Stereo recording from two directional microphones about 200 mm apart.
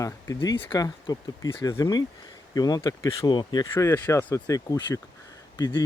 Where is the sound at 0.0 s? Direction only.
15° left (ahead or behind).